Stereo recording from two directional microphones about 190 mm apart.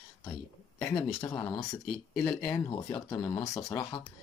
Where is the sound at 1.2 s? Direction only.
15° left (ahead or behind).